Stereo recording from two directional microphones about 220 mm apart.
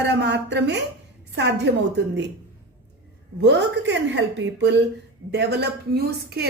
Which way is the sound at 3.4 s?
50° right (ahead or behind).